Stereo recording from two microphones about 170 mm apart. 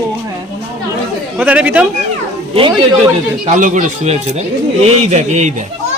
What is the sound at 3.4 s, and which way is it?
Speech, 45° right (ahead or behind).